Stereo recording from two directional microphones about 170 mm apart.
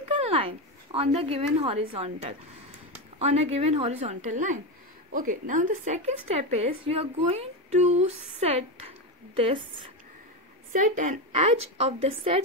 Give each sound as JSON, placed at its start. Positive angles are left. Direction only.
{"t": 0.1, "sound": "a woman's voice", "side_deg": -35}
{"t": 10.7, "sound": "a woman's voice", "side_deg": -50}